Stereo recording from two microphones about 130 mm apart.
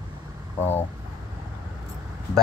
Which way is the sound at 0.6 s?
15° left (ahead or behind).